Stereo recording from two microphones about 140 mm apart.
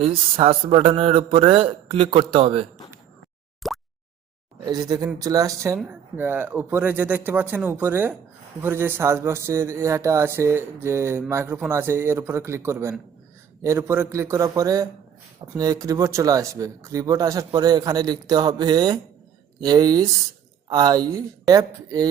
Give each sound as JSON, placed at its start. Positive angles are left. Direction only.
{"t": 0.0, "sound": "a man's voice", "side_deg": -40}
{"t": 3.6, "sound": "plop", "side_deg": 0}
{"t": 4.6, "sound": "speech", "side_deg": -30}